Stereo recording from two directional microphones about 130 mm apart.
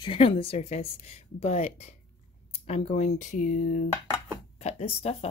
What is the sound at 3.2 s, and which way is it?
Speech, 75° left (ahead or behind).